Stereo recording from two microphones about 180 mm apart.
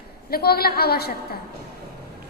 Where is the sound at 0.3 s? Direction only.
60° left (ahead or behind).